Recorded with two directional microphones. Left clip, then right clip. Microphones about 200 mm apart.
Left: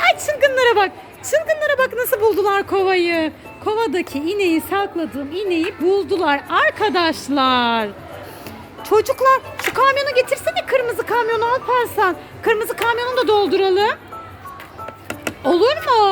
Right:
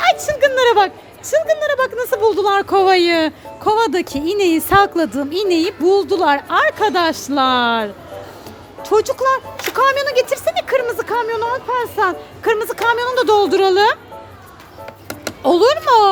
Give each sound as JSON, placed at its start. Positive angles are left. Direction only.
{"t": 0.3, "sound": "speech", "side_deg": 0}
{"t": 2.7, "sound": "speech", "side_deg": -20}
{"t": 4.8, "sound": "a woman's voice", "side_deg": -35}
{"t": 11.3, "sound": "a woman's voice", "side_deg": 20}
{"t": 15.3, "sound": "a child's voice", "side_deg": -15}